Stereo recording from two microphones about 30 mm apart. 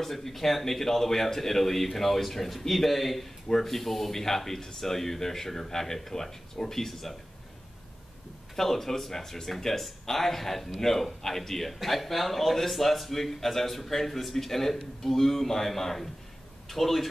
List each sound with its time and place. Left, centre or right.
0.0 s a man's voice: centre
8.5 s a man's voice: centre